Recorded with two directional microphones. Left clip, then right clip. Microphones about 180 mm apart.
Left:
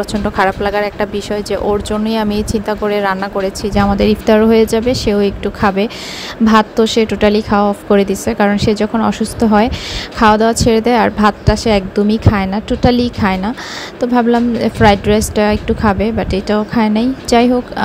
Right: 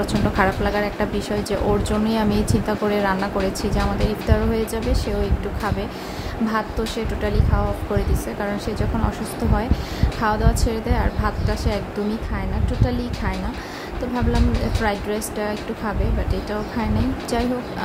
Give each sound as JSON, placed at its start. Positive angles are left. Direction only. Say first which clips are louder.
{"t": 0.0, "sound": "a woman's voice", "louder": "left 6 dB", "side_deg": 40}
{"t": 14.8, "sound": "speech", "louder": "left 15 dB", "side_deg": 45}